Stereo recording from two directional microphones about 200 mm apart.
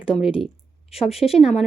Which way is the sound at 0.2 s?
30° left (ahead or behind).